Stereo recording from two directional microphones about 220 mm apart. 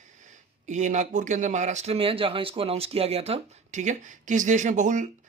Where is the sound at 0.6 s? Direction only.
35° right (ahead or behind).